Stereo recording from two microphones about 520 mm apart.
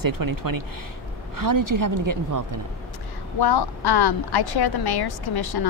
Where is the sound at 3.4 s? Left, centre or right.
Left.